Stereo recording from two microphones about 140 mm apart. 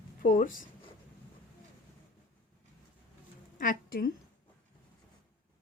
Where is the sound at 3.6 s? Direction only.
85° left.